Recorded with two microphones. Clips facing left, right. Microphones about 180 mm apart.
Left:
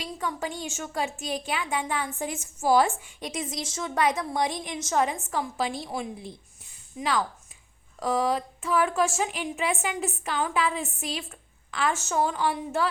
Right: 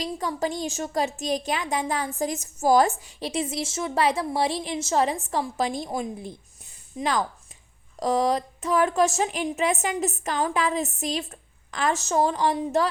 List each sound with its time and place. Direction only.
0.0 s a woman's voice: 35° right (ahead or behind)